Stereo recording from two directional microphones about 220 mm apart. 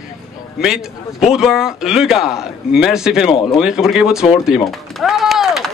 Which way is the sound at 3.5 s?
Centre (ahead or behind).